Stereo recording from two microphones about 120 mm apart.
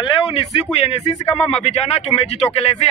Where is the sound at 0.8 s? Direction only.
70° left (ahead or behind).